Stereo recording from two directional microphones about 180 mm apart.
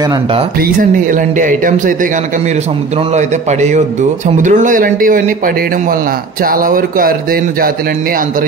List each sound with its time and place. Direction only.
0.6 s speech: 50° right (ahead or behind)
3.2 s a man's voice: 40° right (ahead or behind)
6.4 s speech: 50° right (ahead or behind)